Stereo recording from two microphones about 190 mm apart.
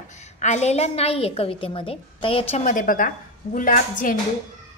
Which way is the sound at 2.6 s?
45° left (ahead or behind).